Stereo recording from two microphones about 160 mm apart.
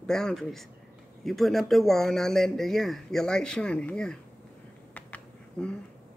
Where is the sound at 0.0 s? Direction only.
5° left (ahead or behind).